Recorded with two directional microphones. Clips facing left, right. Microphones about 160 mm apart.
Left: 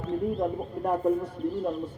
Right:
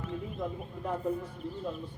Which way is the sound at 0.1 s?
55° left (ahead or behind).